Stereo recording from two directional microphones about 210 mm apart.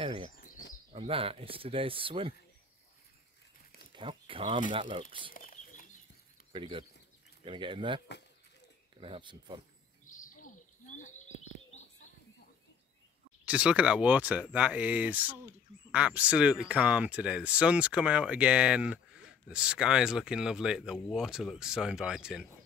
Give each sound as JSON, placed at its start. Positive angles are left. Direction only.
{"t": 0.0, "sound": "bird", "side_deg": -25}
{"t": 0.4, "sound": "bird", "side_deg": 40}
{"t": 0.9, "sound": "speech", "side_deg": -25}
{"t": 3.9, "sound": "speech", "side_deg": -25}
{"t": 5.3, "sound": "chicken", "side_deg": 40}
{"t": 6.5, "sound": "speech", "side_deg": -25}
{"t": 9.0, "sound": "speech", "side_deg": -25}
{"t": 10.0, "sound": "bird", "side_deg": 40}
{"t": 13.5, "sound": "speech", "side_deg": -5}